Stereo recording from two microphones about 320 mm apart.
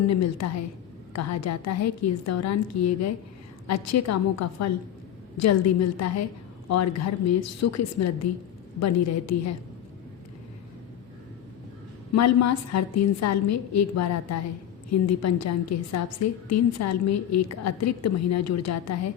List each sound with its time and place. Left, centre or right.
0.1 s a woman's voice: left
12.1 s a woman's voice: left